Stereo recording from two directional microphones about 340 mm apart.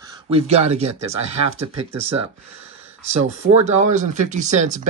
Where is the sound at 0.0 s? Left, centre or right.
Centre.